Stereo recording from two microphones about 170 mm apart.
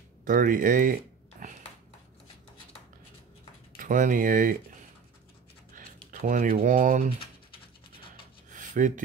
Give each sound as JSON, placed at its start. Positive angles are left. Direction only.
{"t": 0.2, "sound": "speech", "side_deg": -55}
{"t": 3.7, "sound": "speech", "side_deg": -50}
{"t": 6.2, "sound": "speech", "side_deg": -50}
{"t": 8.5, "sound": "a sound", "side_deg": -50}